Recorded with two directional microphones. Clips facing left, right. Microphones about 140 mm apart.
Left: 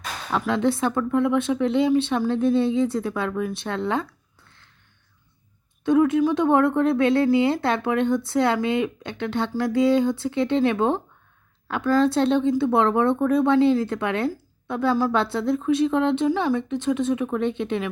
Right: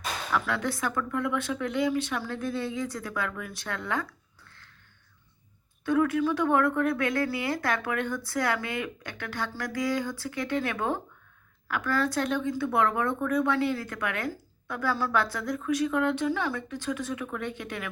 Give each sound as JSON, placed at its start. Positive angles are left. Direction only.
{"t": 0.3, "sound": "speech", "side_deg": 20}
{"t": 5.8, "sound": "speech", "side_deg": 20}